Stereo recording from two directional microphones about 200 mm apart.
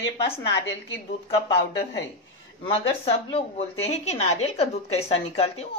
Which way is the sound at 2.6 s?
30° left (ahead or behind).